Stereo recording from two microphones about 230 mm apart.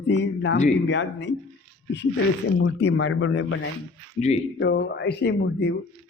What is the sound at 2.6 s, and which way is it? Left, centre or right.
Speech, left.